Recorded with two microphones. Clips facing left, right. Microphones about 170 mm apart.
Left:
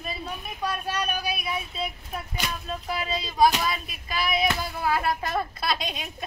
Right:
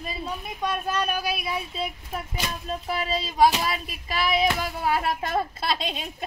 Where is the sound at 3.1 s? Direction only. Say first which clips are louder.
Right 1 dB; 30° right (ahead or behind).